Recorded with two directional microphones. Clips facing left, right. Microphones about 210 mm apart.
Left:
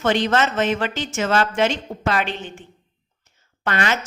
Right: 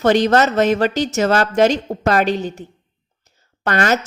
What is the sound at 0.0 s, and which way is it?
A woman's voice, 40° right (ahead or behind).